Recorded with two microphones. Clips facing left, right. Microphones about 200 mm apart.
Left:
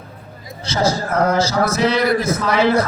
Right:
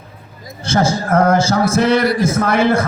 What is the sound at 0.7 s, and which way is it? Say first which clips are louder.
A man's voice: right 3 dB; 50° right (ahead or behind).